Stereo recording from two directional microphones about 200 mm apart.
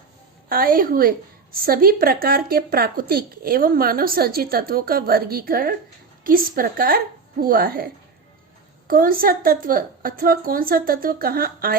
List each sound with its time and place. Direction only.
0.4 s speech: 45° right (ahead or behind)
8.9 s speech: 45° right (ahead or behind)